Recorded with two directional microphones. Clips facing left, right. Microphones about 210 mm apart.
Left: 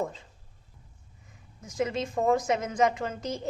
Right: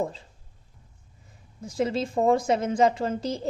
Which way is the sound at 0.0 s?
30° right (ahead or behind).